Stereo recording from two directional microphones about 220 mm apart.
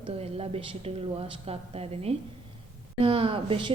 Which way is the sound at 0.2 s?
25° right (ahead or behind).